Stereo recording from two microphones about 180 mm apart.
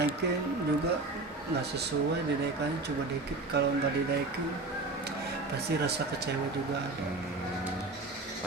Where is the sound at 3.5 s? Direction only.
65° right (ahead or behind).